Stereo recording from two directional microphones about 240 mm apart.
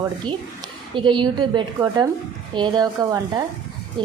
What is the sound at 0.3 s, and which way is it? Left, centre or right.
A woman's voice, centre.